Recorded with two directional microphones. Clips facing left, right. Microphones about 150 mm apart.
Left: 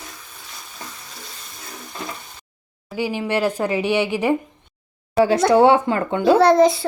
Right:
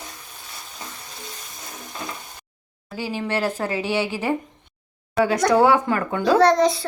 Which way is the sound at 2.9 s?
15° left (ahead or behind).